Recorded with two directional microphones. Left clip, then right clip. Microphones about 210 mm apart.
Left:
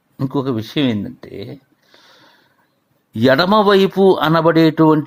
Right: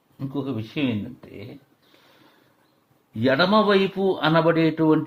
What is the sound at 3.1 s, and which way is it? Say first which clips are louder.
Speech: left 6 dB; 40° left (ahead or behind).